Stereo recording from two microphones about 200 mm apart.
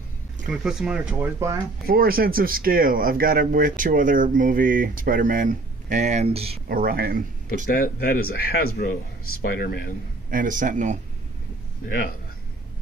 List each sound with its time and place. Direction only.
0.5 s speech: 5° right (ahead or behind)
1.9 s speech: 50° right (ahead or behind); by 6.6 s 30° right (ahead or behind)
6.7 s speech: 45° right (ahead or behind)
7.6 s speech: 45° left (ahead or behind)
10.3 s speech: 40° right (ahead or behind)